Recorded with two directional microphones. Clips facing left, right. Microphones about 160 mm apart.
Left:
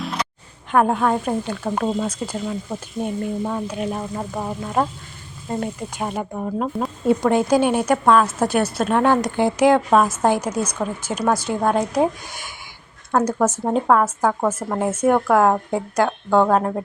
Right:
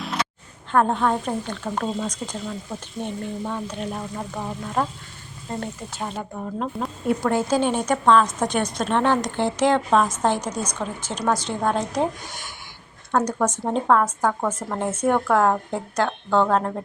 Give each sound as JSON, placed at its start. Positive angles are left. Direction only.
{"t": 0.0, "sound": "a sound", "side_deg": 0}
{"t": 0.7, "sound": "a woman's voice", "side_deg": 10}
{"t": 3.0, "sound": "frying", "side_deg": 5}
{"t": 3.4, "sound": "a woman's voice", "side_deg": 10}
{"t": 4.2, "sound": "frying", "side_deg": 20}
{"t": 5.5, "sound": "a woman's voice", "side_deg": 15}